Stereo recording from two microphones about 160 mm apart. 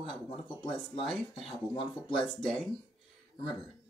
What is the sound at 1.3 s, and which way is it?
Speech, 35° left (ahead or behind).